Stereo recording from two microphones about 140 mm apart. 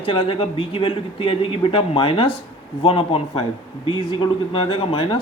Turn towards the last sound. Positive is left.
turn(degrees=40)  # may be behind; listen again after turning